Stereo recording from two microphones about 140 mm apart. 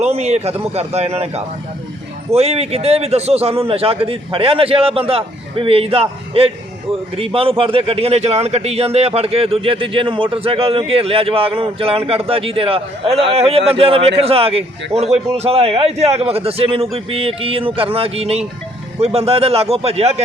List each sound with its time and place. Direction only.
0.0 s a man's voice: 50° right (ahead or behind)
2.3 s a man's voice: 45° right (ahead or behind)